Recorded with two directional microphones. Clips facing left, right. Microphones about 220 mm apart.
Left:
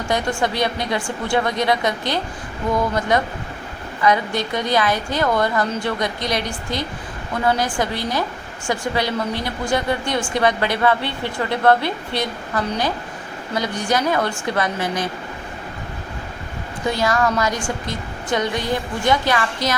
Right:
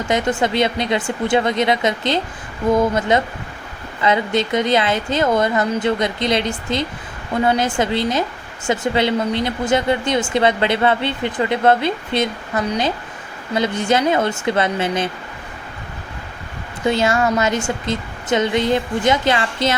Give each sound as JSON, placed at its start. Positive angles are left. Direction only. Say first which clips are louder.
{"t": 0.1, "sound": "speech", "louder": "right 3 dB", "side_deg": -20}
{"t": 16.9, "sound": "speech", "louder": "right 2 dB", "side_deg": -25}